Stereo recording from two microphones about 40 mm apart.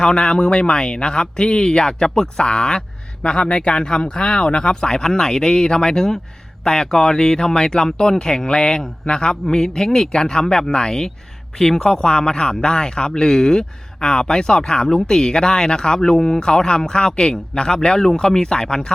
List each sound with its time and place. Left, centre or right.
0.0 s speech: centre